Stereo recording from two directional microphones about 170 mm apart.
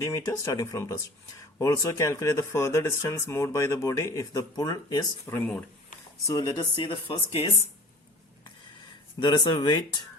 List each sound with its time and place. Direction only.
0.0 s speech: 15° left (ahead or behind)
6.2 s speech: 20° left (ahead or behind)
9.2 s speech: 25° left (ahead or behind)